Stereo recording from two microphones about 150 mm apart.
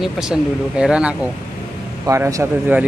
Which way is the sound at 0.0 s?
5° right (ahead or behind).